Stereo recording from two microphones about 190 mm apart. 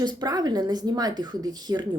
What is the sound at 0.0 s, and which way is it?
Speech, 20° right (ahead or behind).